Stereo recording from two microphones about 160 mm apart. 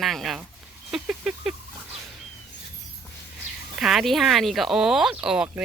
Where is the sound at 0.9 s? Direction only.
5° right (ahead or behind).